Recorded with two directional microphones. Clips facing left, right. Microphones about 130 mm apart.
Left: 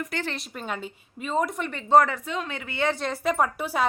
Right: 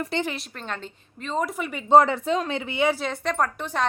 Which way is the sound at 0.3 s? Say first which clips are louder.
Left 1 dB; 10° left (ahead or behind).